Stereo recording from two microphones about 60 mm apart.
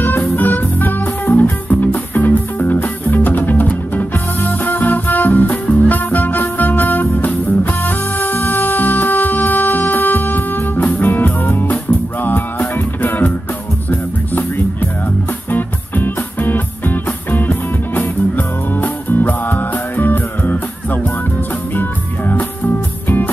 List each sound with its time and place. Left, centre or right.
0.0 s music: left